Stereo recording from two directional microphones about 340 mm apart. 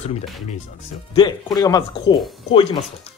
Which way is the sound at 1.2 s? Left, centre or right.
Centre.